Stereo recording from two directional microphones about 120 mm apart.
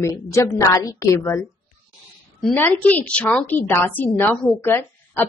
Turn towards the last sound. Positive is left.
turn(degrees=20)  # may be behind; listen again after turning